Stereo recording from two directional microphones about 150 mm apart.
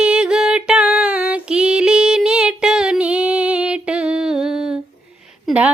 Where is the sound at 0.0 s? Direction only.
5° right (ahead or behind).